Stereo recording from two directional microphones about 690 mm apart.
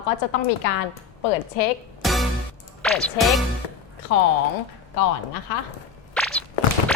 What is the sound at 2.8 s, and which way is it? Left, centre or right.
Snicker, centre.